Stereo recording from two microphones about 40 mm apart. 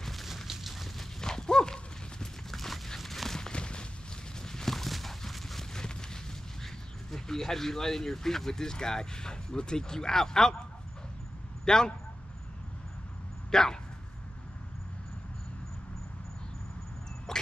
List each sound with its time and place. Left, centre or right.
0.0 s a sound: centre
1.2 s horse: centre
2.5 s a sound: centre; by 3.8 s left
4.4 s clip-clop: centre
5.7 s clip-clop: centre
6.6 s speech: centre
11.6 s speech: centre
13.5 s speech: centre
17.3 s a sound: centre